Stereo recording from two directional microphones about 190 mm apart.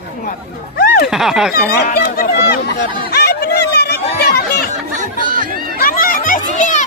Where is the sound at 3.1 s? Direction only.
55° left (ahead or behind).